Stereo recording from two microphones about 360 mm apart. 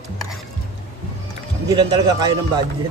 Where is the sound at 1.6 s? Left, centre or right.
Centre.